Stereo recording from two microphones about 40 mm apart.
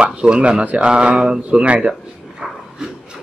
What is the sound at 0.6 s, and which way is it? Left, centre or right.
Speech, right.